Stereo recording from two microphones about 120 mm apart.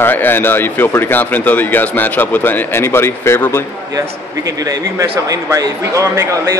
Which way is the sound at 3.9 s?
30° right (ahead or behind).